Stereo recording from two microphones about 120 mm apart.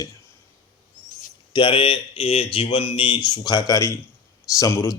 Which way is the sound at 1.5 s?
45° left (ahead or behind).